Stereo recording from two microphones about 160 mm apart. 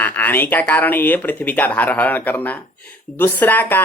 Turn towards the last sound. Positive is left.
turn(degrees=10)  # may be behind; listen again after turning